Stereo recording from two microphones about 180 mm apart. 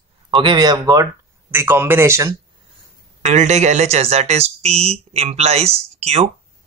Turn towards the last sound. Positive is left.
turn(degrees=-35)  # may be behind; listen again after turning